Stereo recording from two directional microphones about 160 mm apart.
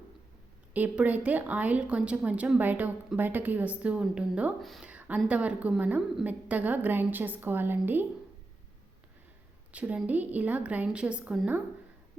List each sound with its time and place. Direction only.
0.7 s a woman's voice: 10° right (ahead or behind)
9.7 s a woman's voice: 10° right (ahead or behind)